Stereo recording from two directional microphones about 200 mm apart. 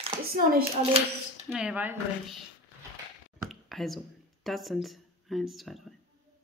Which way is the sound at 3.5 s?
Centre (ahead or behind).